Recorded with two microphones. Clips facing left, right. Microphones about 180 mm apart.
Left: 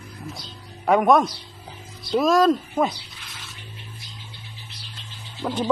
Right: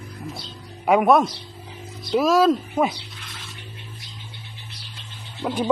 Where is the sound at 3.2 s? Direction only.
Centre (ahead or behind).